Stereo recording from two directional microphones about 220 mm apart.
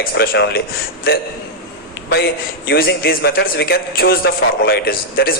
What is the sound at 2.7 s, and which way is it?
A man's voice, 45° left (ahead or behind).